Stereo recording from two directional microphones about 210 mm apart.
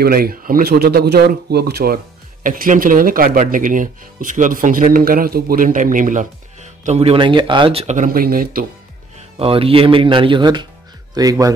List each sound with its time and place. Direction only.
0.0 s speech: 45° right (ahead or behind)
9.4 s speech: 25° right (ahead or behind)